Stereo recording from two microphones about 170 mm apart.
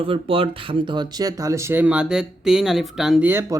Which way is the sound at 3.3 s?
15° right (ahead or behind).